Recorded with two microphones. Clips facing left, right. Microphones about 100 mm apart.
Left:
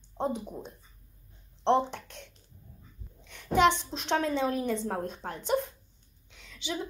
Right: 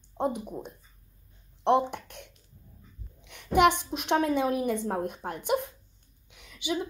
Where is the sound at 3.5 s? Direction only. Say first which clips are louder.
Right 2 dB; 15° right (ahead or behind).